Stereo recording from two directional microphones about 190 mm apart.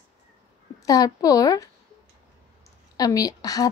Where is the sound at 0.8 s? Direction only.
20° left (ahead or behind).